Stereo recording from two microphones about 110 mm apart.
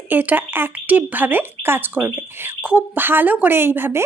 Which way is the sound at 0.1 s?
15° right (ahead or behind).